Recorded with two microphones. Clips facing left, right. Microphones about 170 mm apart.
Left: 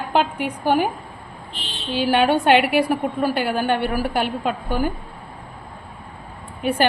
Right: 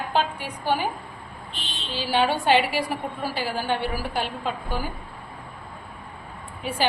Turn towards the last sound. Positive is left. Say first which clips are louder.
# left 9 dB
turn(degrees=60)  # may be behind; listen again after turning